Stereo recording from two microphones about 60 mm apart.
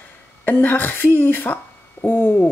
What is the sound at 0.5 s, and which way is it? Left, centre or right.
Speech, left.